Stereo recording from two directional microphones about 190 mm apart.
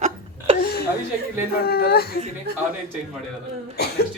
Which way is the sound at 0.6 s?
55° left (ahead or behind).